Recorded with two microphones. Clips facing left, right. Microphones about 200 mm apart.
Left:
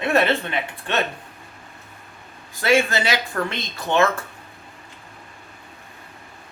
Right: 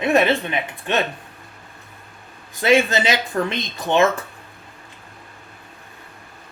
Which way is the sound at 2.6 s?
20° right (ahead or behind).